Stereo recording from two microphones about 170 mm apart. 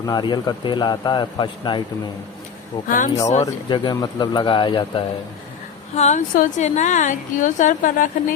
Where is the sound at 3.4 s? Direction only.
25° left (ahead or behind).